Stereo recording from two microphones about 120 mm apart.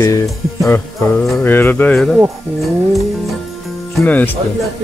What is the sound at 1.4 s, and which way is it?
Music, 15° left (ahead or behind).